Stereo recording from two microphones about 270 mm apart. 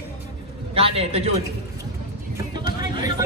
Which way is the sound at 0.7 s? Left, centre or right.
Right.